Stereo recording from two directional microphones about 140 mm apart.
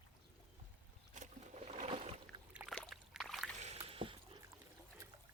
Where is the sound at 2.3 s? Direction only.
35° right (ahead or behind).